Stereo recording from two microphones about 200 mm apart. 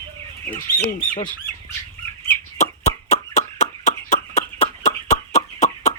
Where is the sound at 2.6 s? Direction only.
35° left (ahead or behind).